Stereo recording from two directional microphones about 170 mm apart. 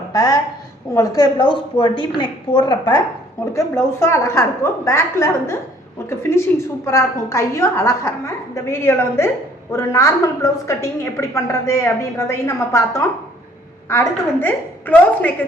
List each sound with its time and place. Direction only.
0.1 s a woman's voice: 20° left (ahead or behind)